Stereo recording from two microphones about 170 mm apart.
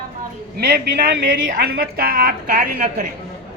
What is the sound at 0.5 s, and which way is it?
Speech, 70° right (ahead or behind).